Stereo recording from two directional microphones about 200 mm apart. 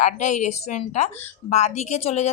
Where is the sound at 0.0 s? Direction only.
40° left (ahead or behind).